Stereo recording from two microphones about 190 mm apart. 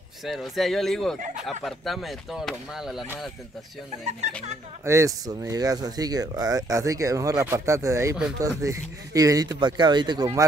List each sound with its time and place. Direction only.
0.2 s speech: centre (ahead or behind)
4.8 s speech: 15° right (ahead or behind)